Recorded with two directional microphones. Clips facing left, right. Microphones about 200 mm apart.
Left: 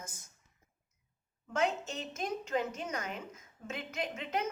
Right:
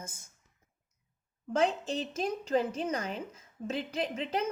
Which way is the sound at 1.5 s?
30° right (ahead or behind).